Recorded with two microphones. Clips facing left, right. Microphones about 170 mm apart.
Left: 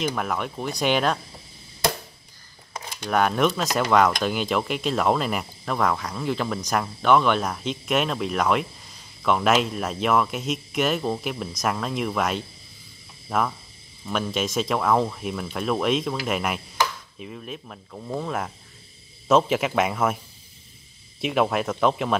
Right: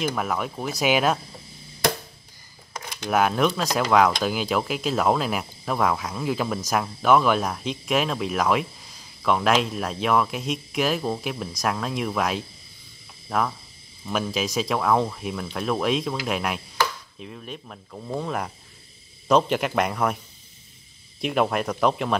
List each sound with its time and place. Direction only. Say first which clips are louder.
0.0 s speech: even; centre (ahead or behind)
3.1 s speech: even; centre (ahead or behind)
21.2 s speech: even; centre (ahead or behind)